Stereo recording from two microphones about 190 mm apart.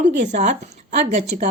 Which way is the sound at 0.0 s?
40° right (ahead or behind).